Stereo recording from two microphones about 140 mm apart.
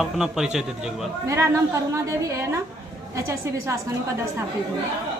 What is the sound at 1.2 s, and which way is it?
A woman's voice, 20° right (ahead or behind).